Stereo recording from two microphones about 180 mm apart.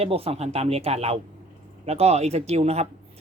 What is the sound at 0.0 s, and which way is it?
Speech, 35° right (ahead or behind).